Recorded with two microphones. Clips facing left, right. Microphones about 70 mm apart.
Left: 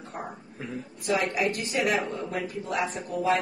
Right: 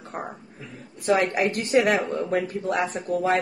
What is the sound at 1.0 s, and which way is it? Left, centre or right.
A woman's voice, right.